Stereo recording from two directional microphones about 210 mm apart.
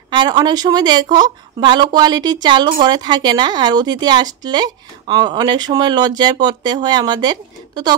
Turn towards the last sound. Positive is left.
turn(degrees=-20)  # may be behind; listen again after turning